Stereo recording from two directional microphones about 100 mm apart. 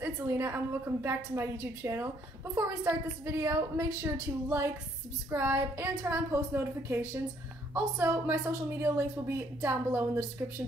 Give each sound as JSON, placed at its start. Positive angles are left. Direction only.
{"t": 0.0, "sound": "a woman's voice", "side_deg": -25}